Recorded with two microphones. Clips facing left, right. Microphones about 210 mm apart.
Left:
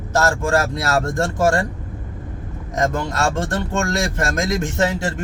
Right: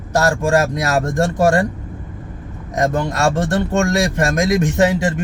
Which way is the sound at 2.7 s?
20° right (ahead or behind).